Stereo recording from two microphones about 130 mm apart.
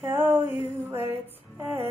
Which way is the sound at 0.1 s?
20° right (ahead or behind).